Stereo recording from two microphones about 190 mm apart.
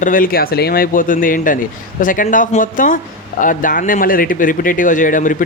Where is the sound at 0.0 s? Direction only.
45° left (ahead or behind).